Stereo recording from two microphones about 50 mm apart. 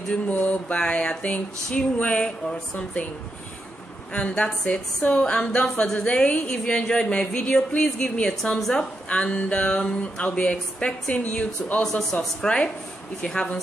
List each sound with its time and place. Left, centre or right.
0.3 s a sound: left
0.7 s speech: centre
4.1 s a woman's voice: left
9.1 s a woman's voice: centre